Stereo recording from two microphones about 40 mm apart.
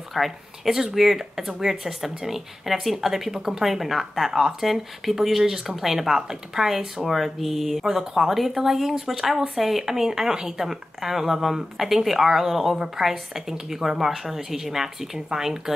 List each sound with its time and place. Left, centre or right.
0.1 s speech: centre